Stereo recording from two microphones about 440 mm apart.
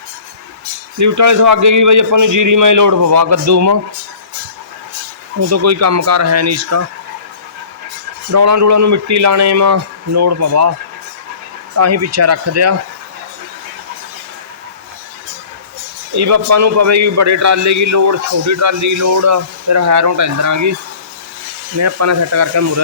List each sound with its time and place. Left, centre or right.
0.9 s a man's voice: right
5.4 s a man's voice: right
8.3 s a man's voice: right
11.8 s a man's voice: right
16.1 s a man's voice: right
21.8 s a man's voice: right